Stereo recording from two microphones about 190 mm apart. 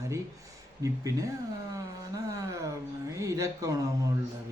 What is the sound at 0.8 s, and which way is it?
Speech, 15° right (ahead or behind).